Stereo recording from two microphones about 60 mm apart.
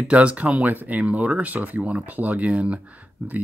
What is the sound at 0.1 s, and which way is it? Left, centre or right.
Speech, right.